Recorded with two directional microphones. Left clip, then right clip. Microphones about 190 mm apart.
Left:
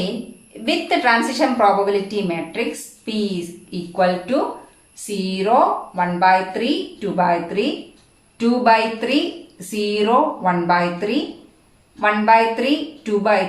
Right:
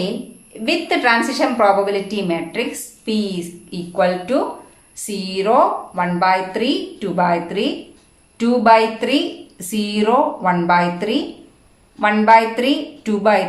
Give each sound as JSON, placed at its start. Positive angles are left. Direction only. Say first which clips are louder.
{"t": 0.6, "sound": "a woman's voice", "louder": "right 1 dB", "side_deg": -35}